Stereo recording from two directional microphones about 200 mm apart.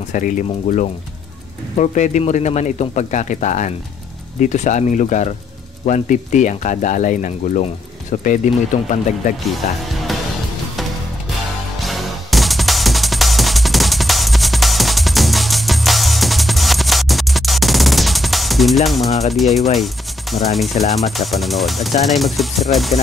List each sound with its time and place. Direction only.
0.1 s speech: 40° left (ahead or behind)
9.5 s speech: centre (ahead or behind)
11.8 s music: centre (ahead or behind)
19.7 s speech: centre (ahead or behind)
20.9 s music: centre (ahead or behind)